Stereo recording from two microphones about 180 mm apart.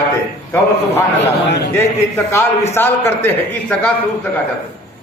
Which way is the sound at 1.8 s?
15° left (ahead or behind).